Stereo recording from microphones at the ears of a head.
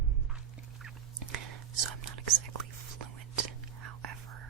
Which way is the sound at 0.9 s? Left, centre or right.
Right.